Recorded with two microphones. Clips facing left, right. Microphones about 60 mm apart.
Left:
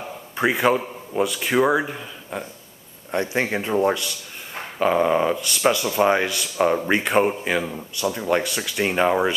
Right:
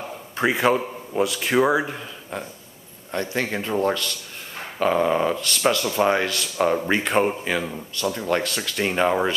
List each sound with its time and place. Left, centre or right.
0.0 s a man's voice: centre
3.1 s a man's voice: centre